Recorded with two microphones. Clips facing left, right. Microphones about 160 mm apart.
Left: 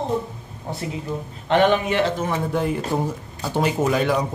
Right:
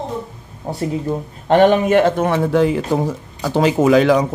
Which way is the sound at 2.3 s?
90° right.